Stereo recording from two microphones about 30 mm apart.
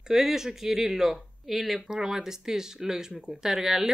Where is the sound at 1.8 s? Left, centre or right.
Centre.